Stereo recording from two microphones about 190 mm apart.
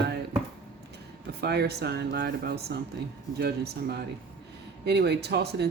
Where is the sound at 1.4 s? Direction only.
60° right (ahead or behind).